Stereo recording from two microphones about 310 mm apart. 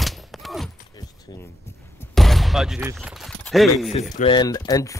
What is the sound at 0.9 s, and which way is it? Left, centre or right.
Keys jangling, centre.